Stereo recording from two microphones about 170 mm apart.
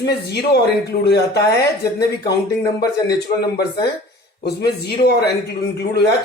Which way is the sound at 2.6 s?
20° left (ahead or behind).